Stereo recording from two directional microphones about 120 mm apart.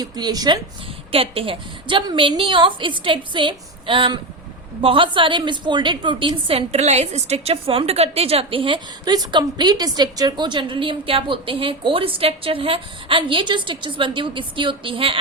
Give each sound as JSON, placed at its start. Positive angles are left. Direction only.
{"t": 0.0, "sound": "speech", "side_deg": -35}
{"t": 1.1, "sound": "a woman's voice", "side_deg": -50}